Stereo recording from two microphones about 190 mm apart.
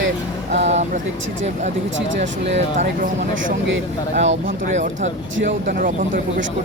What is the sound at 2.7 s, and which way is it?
Speech, 45° right (ahead or behind).